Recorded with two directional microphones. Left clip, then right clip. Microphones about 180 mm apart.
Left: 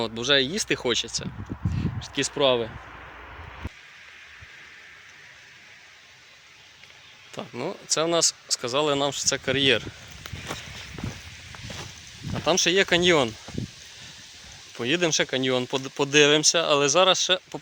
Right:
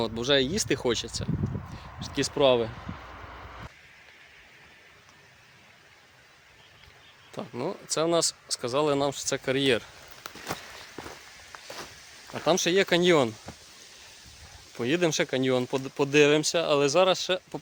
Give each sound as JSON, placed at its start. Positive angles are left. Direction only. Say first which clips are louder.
{"t": 0.0, "sound": "speech", "louder": "left 2 dB", "side_deg": -10}
{"t": 2.7, "sound": "a sound", "louder": "left 1 dB", "side_deg": -65}
{"t": 7.3, "sound": "speech", "louder": "left 1 dB", "side_deg": 0}
{"t": 10.2, "sound": "walk", "louder": "left 1 dB", "side_deg": -5}
{"t": 12.3, "sound": "speech", "louder": "left 2 dB", "side_deg": 0}
{"t": 14.8, "sound": "speech", "louder": "left 2 dB", "side_deg": 0}